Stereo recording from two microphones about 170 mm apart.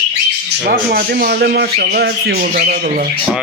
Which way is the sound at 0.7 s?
60° right (ahead or behind).